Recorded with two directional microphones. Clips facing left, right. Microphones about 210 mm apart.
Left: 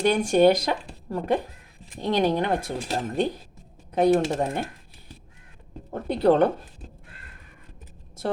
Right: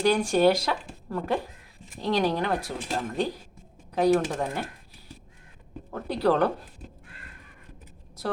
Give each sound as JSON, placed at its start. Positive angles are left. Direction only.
{"t": 0.0, "sound": "speech", "side_deg": 20}
{"t": 5.9, "sound": "speech", "side_deg": 25}